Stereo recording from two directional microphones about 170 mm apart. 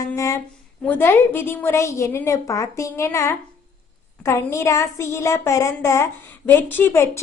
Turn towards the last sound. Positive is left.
turn(degrees=15)  # may be behind; listen again after turning